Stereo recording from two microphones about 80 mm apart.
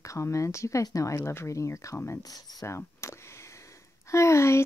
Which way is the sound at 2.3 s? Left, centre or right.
Left.